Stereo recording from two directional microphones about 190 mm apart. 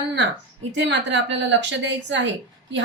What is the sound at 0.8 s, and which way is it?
Speech, 70° right (ahead or behind).